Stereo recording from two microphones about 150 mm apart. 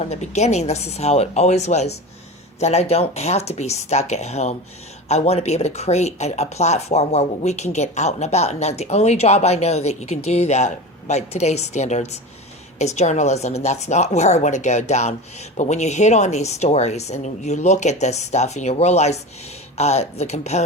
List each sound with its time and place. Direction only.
0.0 s speech: 50° left (ahead or behind)